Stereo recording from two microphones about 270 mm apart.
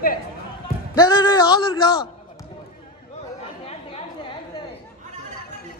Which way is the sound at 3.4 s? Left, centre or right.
Left.